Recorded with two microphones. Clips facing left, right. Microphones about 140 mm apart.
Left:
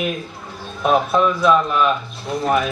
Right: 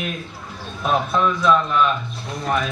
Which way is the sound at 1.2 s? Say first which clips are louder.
Left 2 dB; 5° left (ahead or behind).